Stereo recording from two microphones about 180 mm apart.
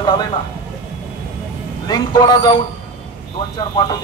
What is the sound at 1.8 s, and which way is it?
Speech, 20° left (ahead or behind).